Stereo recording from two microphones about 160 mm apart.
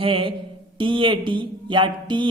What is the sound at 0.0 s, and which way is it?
Speech, 35° right (ahead or behind).